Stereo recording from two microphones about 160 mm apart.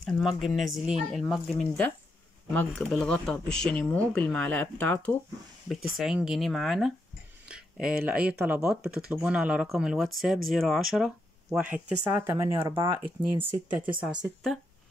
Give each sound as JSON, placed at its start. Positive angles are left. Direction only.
{"t": 0.0, "sound": "speech", "side_deg": 0}
{"t": 11.7, "sound": "speech", "side_deg": -15}